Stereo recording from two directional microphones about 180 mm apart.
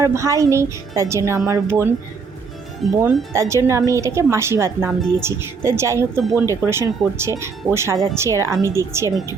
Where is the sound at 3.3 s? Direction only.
15° right (ahead or behind).